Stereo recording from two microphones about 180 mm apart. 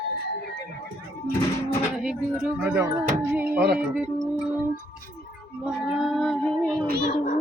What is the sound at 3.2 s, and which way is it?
Music, 10° right (ahead or behind).